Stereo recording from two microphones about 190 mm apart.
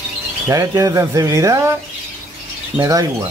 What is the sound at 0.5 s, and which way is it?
Speech, 15° right (ahead or behind).